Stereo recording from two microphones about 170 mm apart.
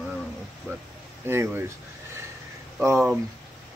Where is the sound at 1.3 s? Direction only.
15° right (ahead or behind).